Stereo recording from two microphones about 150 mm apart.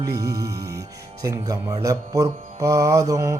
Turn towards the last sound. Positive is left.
turn(degrees=-20)  # may be behind; listen again after turning